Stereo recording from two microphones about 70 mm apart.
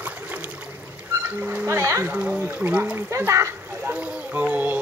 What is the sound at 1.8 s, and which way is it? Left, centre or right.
Speech, right.